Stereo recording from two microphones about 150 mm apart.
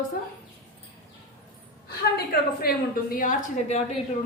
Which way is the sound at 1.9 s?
90° left.